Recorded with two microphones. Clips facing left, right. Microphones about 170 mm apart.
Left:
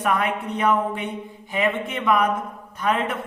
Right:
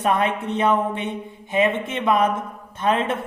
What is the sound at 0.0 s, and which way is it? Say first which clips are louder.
A woman's voice: right 2 dB; 25° right (ahead or behind).